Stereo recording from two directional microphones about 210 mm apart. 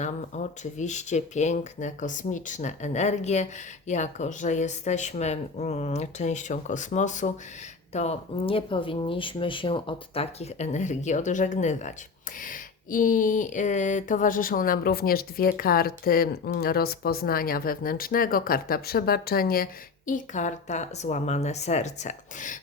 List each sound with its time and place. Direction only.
0.0 s speech: 35° left (ahead or behind)